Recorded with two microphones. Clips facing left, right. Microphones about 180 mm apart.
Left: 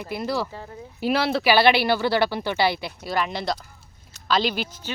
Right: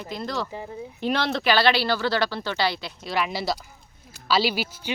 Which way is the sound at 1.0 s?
5° left (ahead or behind).